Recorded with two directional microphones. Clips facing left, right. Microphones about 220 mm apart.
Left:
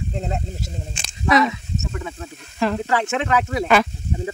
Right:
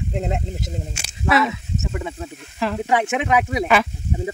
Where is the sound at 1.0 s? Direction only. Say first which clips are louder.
Left 2 dB; 5° right (ahead or behind).